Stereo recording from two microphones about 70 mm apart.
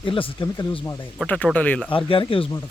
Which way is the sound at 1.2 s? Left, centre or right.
Centre.